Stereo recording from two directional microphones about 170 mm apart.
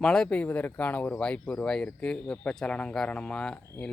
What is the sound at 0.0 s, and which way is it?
Speech, 5° left (ahead or behind).